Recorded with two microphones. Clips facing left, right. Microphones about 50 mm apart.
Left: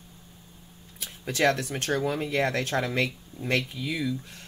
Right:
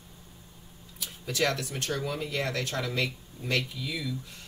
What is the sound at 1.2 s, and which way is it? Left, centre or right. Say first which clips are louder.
Speech: left 5 dB; left.